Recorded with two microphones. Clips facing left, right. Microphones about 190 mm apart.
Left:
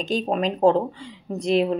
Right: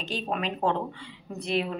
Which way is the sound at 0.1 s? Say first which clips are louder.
Left 7 dB; 40° left (ahead or behind).